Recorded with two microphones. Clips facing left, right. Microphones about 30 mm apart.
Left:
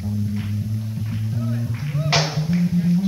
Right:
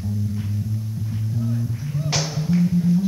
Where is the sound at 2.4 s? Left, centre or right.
Centre.